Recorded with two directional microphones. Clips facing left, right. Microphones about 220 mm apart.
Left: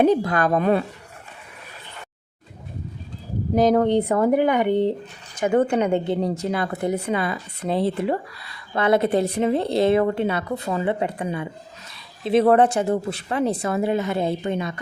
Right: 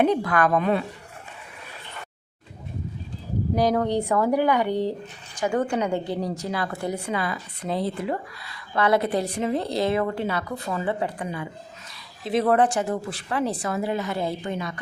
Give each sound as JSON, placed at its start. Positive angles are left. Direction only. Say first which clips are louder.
{"t": 0.0, "sound": "a woman's voice", "louder": "left 3 dB", "side_deg": 30}
{"t": 0.6, "sound": "speech", "louder": "left 4 dB", "side_deg": 45}
{"t": 3.6, "sound": "a woman's voice", "louder": "left 5 dB", "side_deg": 25}